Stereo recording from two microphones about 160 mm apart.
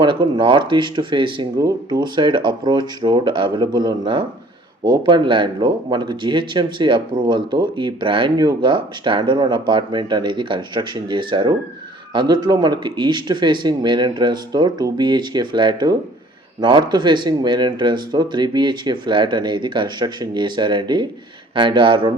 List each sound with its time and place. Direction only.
0.0 s speech: 30° right (ahead or behind)